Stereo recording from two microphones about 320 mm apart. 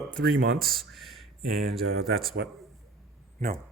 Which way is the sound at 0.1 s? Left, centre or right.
Right.